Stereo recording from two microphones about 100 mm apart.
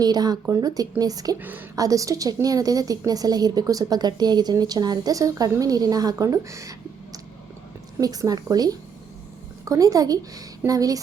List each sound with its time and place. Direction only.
0.0 s a woman's voice: 40° right (ahead or behind)
1.4 s a woman's voice: 20° right (ahead or behind)
1.7 s a woman's voice: 35° right (ahead or behind)